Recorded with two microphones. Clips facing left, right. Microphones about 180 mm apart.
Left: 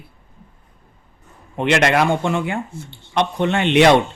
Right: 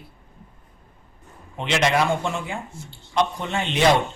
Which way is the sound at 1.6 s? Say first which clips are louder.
Left 5 dB; 60° left (ahead or behind).